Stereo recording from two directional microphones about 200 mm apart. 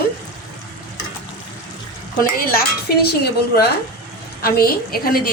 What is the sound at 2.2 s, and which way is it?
A woman's voice, 50° left (ahead or behind).